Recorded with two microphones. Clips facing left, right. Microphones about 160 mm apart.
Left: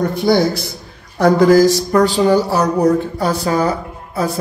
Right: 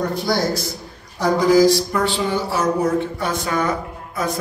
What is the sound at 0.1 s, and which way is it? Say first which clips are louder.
A man's voice: left 6 dB; 55° left (ahead or behind).